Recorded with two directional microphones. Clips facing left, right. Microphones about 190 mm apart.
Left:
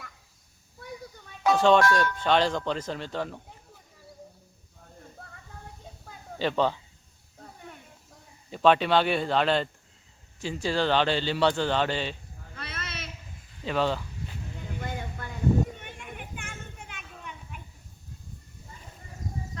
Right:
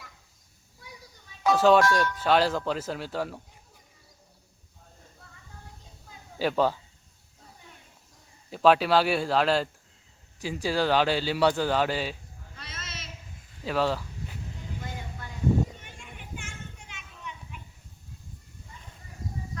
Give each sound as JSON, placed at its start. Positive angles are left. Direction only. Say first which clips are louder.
{"t": 1.5, "sound": "a man's voice", "louder": "right 1 dB", "side_deg": -5}
{"t": 5.2, "sound": "a sound", "louder": "left 7 dB", "side_deg": 55}
{"t": 6.4, "sound": "a man's voice", "louder": "right 1 dB", "side_deg": -5}
{"t": 7.4, "sound": "snake", "louder": "left 7 dB", "side_deg": 60}
{"t": 8.4, "sound": "a man's voice", "louder": "right 1 dB", "side_deg": -5}
{"t": 12.5, "sound": "a sound", "louder": "left 5 dB", "side_deg": 60}
{"t": 13.7, "sound": "speech", "louder": "even", "side_deg": 0}
{"t": 14.8, "sound": "boat", "louder": "left 6 dB", "side_deg": 55}
{"t": 15.8, "sound": "children playing", "louder": "left 5 dB", "side_deg": 60}